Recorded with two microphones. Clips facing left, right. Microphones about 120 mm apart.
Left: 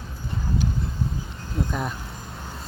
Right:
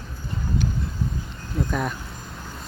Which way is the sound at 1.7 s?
20° left (ahead or behind).